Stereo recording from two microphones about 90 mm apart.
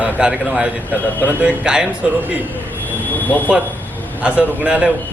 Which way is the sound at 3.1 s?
20° left (ahead or behind).